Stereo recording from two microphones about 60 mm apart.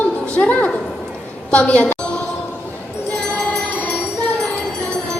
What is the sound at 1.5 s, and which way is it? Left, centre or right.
Speech, left.